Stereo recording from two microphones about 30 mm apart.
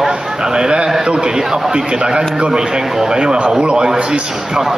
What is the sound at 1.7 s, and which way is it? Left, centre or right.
A man's voice, right.